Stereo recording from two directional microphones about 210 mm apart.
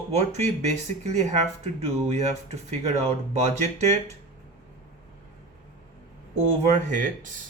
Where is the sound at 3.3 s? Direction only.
30° right (ahead or behind).